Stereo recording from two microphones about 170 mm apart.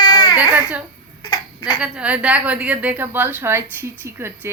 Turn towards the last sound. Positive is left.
turn(degrees=-15)  # may be behind; listen again after turning